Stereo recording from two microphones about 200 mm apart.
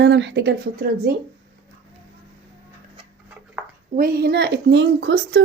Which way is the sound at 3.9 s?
50° right (ahead or behind).